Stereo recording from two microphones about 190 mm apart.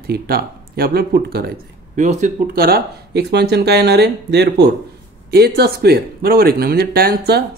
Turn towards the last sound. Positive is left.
turn(degrees=-60)  # may be behind; listen again after turning